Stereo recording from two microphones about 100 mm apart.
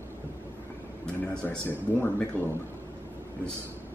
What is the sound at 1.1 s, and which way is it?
A man's voice, 20° left (ahead or behind).